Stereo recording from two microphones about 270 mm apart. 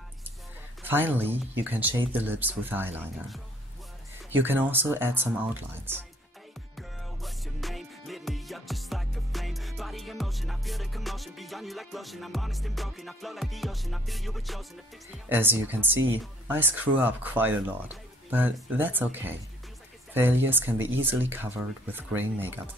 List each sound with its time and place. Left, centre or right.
0.8 s speech: centre
6.8 s music: centre
15.2 s speech: centre